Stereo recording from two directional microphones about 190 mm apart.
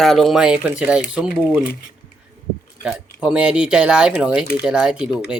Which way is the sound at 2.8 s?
5° right (ahead or behind).